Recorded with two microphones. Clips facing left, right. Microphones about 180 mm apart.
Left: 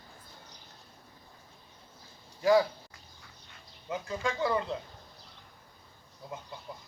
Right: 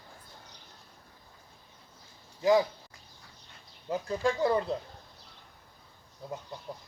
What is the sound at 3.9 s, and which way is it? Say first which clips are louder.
Speech: right 4 dB; 35° right (ahead or behind).